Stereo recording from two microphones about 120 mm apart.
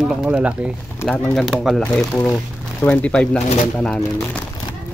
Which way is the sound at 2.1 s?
25° left (ahead or behind).